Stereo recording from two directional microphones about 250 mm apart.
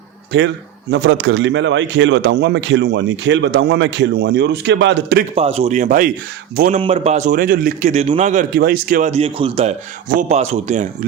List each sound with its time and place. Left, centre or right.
0.3 s a man's voice: right
5.3 s a man's voice: right